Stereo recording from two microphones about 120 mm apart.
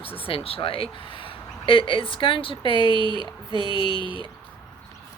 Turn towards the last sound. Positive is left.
turn(degrees=45)  # may be behind; listen again after turning